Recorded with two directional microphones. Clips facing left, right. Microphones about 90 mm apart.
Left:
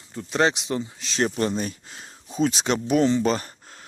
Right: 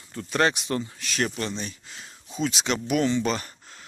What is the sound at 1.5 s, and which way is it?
Speech, 45° left (ahead or behind).